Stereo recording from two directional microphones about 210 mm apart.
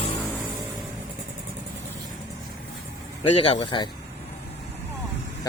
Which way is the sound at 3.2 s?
25° left (ahead or behind).